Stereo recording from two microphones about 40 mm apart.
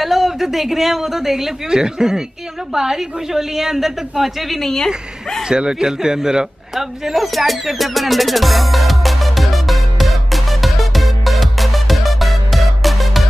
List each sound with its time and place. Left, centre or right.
0.0 s a woman's voice: centre
4.6 s a woman's voice: centre
5.5 s a sound: centre